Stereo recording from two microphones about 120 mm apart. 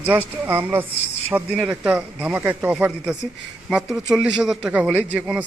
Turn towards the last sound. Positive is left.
turn(degrees=-5)  # may be behind; listen again after turning